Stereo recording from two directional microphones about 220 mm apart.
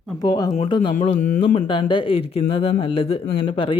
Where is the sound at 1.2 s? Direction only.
35° left (ahead or behind).